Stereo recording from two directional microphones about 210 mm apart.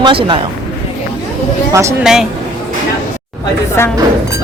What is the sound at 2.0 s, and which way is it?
Speech, centre (ahead or behind).